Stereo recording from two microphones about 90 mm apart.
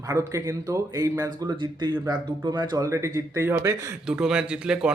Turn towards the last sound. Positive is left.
turn(degrees=-10)  # may be behind; listen again after turning